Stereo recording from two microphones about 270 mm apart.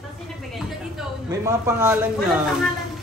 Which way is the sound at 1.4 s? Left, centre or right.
Centre.